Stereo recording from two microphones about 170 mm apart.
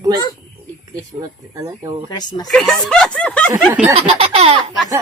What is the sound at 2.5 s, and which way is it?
Speech, centre (ahead or behind).